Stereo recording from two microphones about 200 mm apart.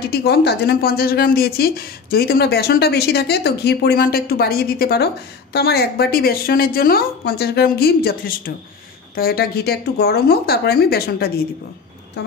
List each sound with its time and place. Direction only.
0.0 s speech: 50° left (ahead or behind)